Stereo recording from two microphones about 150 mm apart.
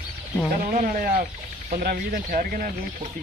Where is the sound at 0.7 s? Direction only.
65° right (ahead or behind).